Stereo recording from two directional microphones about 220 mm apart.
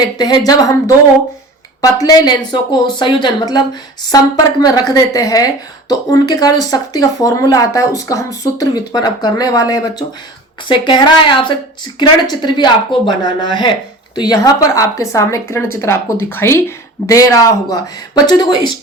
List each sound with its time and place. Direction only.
0.0 s a woman's voice: 20° left (ahead or behind)